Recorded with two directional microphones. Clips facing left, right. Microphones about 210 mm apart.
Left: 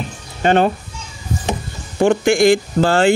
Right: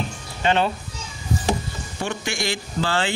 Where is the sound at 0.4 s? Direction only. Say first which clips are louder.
Left 6 dB; 50° left (ahead or behind).